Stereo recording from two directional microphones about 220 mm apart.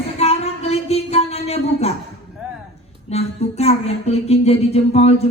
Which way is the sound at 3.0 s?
30° left (ahead or behind).